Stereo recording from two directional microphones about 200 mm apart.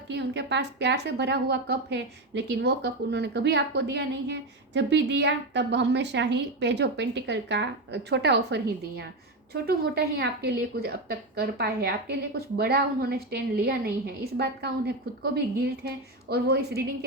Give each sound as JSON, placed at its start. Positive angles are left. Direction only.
{"t": 0.1, "sound": "a woman's voice", "side_deg": -60}